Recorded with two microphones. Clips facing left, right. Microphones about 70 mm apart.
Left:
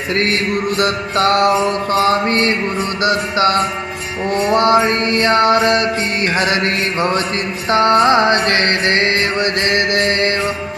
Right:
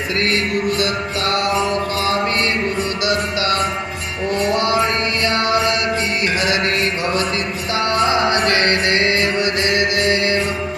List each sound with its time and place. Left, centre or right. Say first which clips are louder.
1.1 s mantra: left 10 dB; left
1.5 s music: left 4 dB; centre
3.0 s music: left 7 dB; left
4.5 s mantra: left 8 dB; left
7.7 s music: left 7 dB; left
8.4 s mantra: left 1 dB; centre
9.4 s music: left 1 dB; left